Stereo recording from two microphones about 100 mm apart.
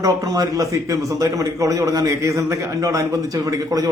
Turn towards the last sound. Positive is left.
turn(degrees=-35)  # may be behind; listen again after turning